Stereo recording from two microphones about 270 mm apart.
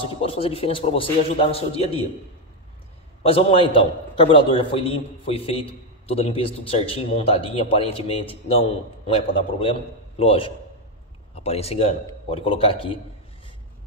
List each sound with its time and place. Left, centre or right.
0.0 s a man's voice: left
3.2 s a man's voice: left